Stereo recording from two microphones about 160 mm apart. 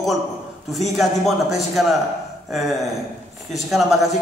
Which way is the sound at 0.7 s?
Centre (ahead or behind).